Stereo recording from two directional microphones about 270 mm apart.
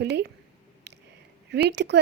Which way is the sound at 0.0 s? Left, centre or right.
Right.